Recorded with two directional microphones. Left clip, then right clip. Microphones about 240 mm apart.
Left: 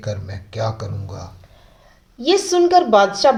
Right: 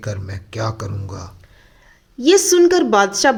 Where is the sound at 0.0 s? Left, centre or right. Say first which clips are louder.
Left 1 dB; right.